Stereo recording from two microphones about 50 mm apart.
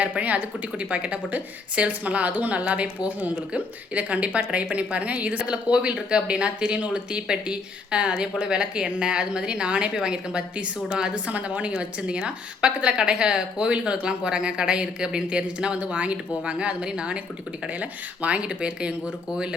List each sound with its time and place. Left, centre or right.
0.0 s a woman's voice: right
11.3 s a woman's voice: right